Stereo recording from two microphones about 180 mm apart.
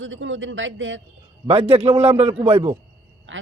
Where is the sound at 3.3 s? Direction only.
90° right.